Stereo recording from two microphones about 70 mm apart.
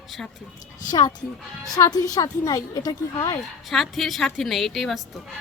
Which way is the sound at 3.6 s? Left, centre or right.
Centre.